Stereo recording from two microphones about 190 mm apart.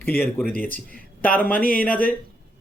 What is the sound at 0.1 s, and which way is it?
Speech, 55° left (ahead or behind).